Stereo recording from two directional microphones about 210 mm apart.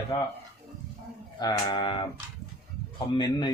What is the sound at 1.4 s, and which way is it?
Speech, 20° left (ahead or behind).